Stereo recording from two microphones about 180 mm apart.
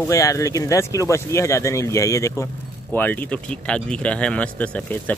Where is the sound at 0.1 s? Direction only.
20° left (ahead or behind).